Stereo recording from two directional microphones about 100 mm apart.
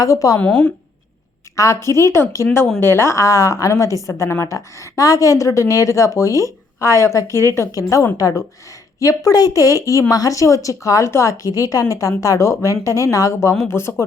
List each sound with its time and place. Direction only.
0.0 s a woman's voice: 35° left (ahead or behind)
0.3 s a woman's voice: 15° left (ahead or behind)
1.5 s a woman's voice: 30° left (ahead or behind)